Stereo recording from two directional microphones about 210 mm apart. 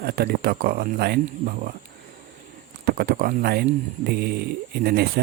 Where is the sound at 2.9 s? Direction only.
45° right (ahead or behind).